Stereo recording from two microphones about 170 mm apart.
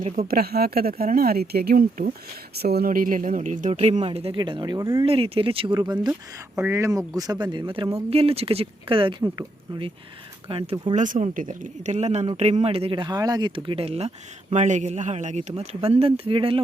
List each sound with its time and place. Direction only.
0.0 s speech: 60° right (ahead or behind)
2.6 s speech: 70° right (ahead or behind); by 3.8 s 45° right (ahead or behind)
3.8 s speech: 35° right (ahead or behind); by 5.0 s 20° right (ahead or behind)
5.0 s speech: 35° right (ahead or behind)
6.6 s speech: 15° right (ahead or behind); by 9.1 s 30° right (ahead or behind)
10.5 s speech: 30° right (ahead or behind)
10.9 s speech: 45° right (ahead or behind); by 16.6 s 30° right (ahead or behind)